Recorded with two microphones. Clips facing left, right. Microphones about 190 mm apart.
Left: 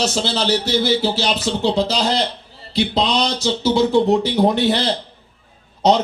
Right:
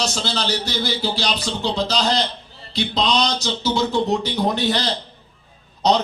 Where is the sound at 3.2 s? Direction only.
30° left (ahead or behind).